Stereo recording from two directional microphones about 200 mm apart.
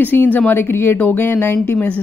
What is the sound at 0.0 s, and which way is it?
Speech, 10° left (ahead or behind).